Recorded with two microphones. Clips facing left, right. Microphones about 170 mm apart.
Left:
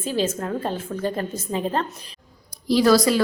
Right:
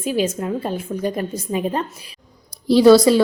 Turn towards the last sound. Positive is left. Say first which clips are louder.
# right 6 dB
turn(degrees=-30)  # may be behind; listen again after turning